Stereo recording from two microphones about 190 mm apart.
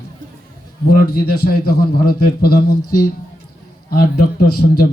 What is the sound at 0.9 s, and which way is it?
A man's voice, 55° left (ahead or behind).